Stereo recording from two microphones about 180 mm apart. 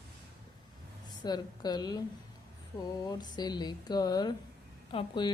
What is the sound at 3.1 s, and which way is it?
Speech, 25° left (ahead or behind).